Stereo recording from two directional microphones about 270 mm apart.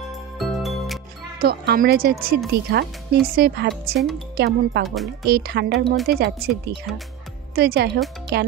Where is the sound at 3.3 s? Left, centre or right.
Right.